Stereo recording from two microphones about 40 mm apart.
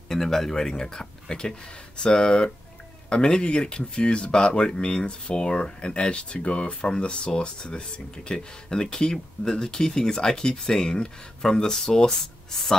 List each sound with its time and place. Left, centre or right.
0.1 s speech: centre